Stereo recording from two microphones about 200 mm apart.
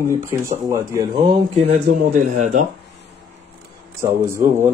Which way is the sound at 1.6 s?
35° right (ahead or behind).